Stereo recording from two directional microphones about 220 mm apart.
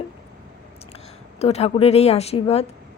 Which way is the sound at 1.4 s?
30° left (ahead or behind).